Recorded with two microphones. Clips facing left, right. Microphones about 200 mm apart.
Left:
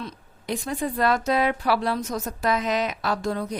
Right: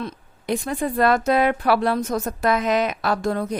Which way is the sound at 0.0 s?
55° right (ahead or behind).